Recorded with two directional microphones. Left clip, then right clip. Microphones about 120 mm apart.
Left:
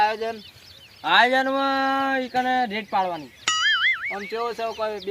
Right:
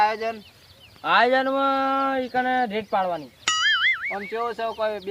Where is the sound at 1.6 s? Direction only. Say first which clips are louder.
Even; 60° right (ahead or behind).